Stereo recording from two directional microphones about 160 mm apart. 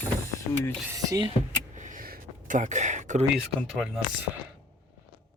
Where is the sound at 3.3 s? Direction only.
Centre (ahead or behind).